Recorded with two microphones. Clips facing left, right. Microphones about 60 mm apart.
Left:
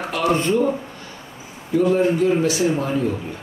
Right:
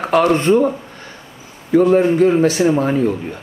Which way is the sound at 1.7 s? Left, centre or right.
Right.